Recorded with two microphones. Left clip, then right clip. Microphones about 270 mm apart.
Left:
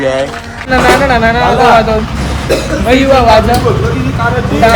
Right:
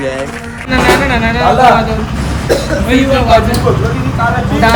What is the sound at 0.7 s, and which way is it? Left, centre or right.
Speech, centre.